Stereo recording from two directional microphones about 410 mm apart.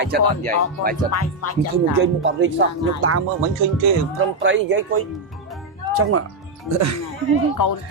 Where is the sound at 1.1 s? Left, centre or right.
Left.